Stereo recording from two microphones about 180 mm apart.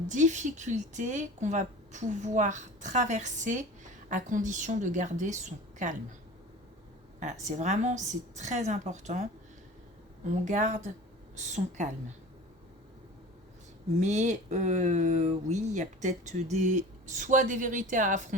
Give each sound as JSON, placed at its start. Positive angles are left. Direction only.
{"t": 0.1, "sound": "speech", "side_deg": -40}
{"t": 7.2, "sound": "a woman's voice", "side_deg": -40}
{"t": 10.3, "sound": "a woman's voice", "side_deg": -40}
{"t": 14.0, "sound": "speech", "side_deg": -40}